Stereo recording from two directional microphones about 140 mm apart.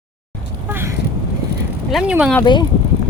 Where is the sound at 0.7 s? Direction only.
15° right (ahead or behind).